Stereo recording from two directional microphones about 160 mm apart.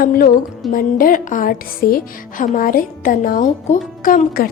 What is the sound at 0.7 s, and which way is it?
Speech, 60° left (ahead or behind).